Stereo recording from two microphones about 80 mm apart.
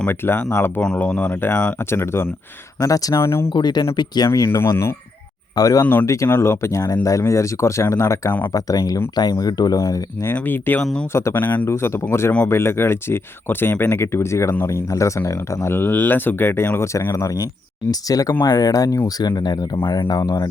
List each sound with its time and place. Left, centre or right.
0.1 s speech: left
0.9 s speech: centre
2.8 s speech: left
3.2 s speech: left
3.5 s speech: left
4.4 s speech: left
5.5 s speech: left
5.8 s speech: left
10.2 s speech: left
11.1 s speech: left
11.3 s speech: left
18.3 s speech: left
19.7 s speech: left